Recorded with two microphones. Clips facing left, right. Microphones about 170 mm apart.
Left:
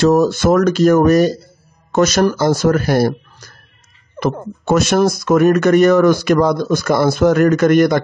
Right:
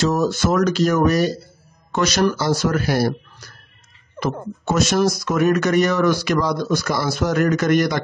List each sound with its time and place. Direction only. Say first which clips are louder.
0.0 s speech: left 7 dB; 55° left (ahead or behind)
4.2 s speech: left 5 dB; 60° left (ahead or behind)